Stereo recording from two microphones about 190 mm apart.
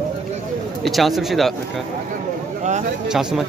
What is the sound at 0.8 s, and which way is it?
Speech, centre (ahead or behind).